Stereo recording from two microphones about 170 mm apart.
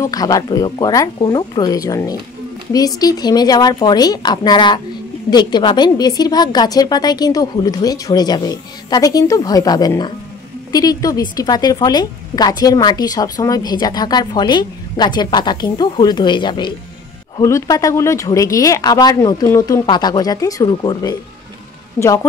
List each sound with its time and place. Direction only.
0.0 s a woman's voice: 20° left (ahead or behind)